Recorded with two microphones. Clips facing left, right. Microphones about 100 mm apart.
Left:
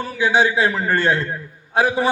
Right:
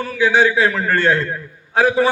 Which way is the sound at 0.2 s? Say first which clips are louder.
Right 2 dB; 15° left (ahead or behind).